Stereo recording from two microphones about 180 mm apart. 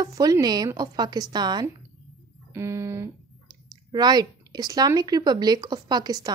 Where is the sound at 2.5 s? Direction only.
15° right (ahead or behind).